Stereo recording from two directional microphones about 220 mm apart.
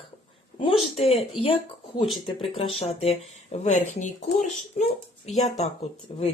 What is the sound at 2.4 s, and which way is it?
Speech, 25° left (ahead or behind).